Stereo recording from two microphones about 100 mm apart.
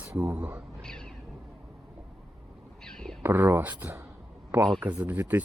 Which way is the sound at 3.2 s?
20° right (ahead or behind).